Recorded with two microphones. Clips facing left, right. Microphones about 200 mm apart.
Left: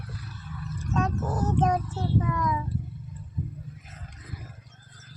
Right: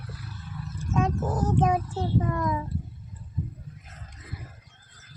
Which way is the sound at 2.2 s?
45° right (ahead or behind).